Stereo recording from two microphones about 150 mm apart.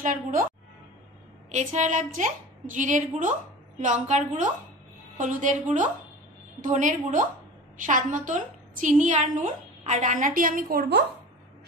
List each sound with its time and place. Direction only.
0.0 s a woman's voice: 65° right (ahead or behind)
1.5 s a woman's voice: 55° right (ahead or behind); by 11.1 s 90° right